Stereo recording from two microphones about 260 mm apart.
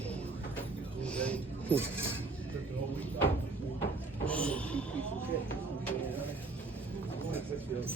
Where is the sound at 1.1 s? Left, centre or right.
Centre.